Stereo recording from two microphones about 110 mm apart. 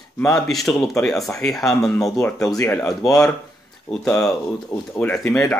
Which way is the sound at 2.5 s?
20° left (ahead or behind).